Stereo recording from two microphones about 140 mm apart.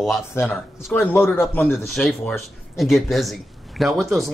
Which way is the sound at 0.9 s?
15° left (ahead or behind).